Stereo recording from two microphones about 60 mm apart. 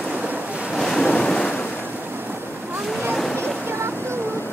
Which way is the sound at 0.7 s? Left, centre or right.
Centre.